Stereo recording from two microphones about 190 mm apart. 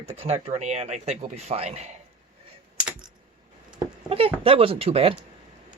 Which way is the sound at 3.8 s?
30° right (ahead or behind).